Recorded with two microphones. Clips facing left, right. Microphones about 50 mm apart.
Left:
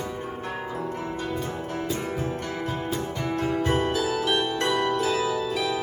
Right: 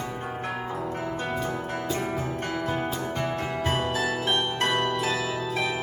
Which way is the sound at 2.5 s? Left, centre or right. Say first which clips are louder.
Right 1 dB; right.